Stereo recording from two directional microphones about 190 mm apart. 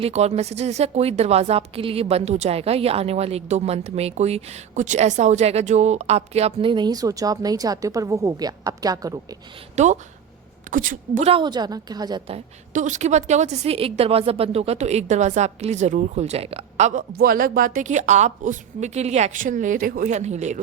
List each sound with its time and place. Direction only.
0.0 s a woman's voice: 35° right (ahead or behind)
9.7 s a woman's voice: 40° right (ahead or behind); by 12.4 s 20° right (ahead or behind)
12.7 s a woman's voice: 40° right (ahead or behind)
17.1 s a woman's voice: 50° right (ahead or behind)